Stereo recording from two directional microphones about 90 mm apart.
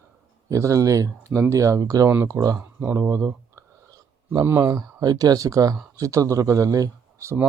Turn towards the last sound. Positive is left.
turn(degrees=-35)  # may be behind; listen again after turning